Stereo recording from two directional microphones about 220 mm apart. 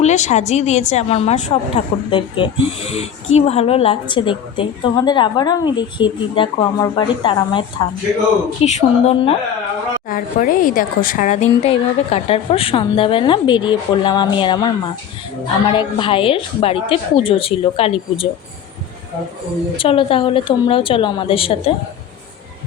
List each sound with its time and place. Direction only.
0.0 s speech: 30° left (ahead or behind)
8.6 s speech: 30° left (ahead or behind)
19.7 s speech: 25° left (ahead or behind)